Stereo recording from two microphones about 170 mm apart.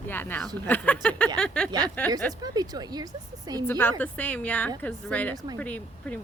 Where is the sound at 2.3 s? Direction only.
20° right (ahead or behind).